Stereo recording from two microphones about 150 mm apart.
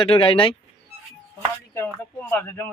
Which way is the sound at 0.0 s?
35° left (ahead or behind).